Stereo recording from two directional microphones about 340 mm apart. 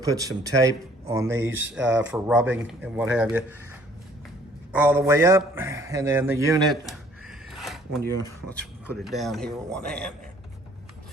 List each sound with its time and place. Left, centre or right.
0.0 s speech: centre
1.4 s speech: right
1.7 s speech: centre
4.8 s speech: centre